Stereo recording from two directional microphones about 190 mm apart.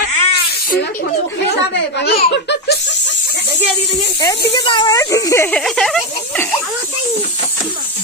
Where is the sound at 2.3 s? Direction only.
65° left (ahead or behind).